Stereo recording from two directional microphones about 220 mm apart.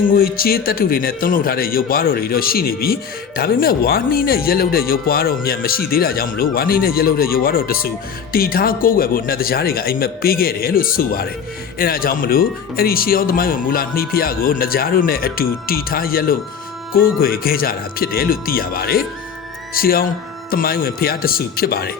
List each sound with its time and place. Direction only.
0.1 s a man's voice: 40° left (ahead or behind)